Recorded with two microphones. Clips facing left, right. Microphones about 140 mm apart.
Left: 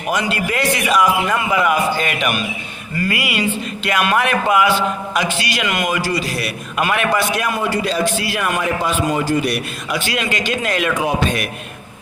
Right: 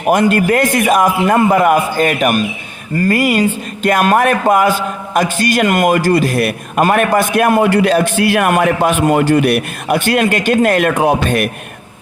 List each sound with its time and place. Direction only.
0.0 s speech: 50° right (ahead or behind)